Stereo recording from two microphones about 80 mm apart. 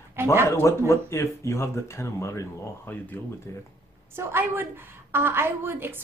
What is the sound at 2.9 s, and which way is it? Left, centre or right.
Speech, left.